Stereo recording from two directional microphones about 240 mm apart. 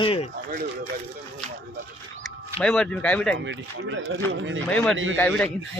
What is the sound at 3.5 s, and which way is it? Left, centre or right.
Speech, right.